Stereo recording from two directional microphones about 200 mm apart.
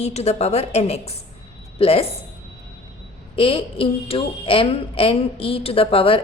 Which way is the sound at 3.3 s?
25° left (ahead or behind).